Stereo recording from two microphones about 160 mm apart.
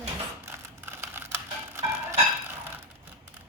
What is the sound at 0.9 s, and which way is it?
Music, 15° right (ahead or behind).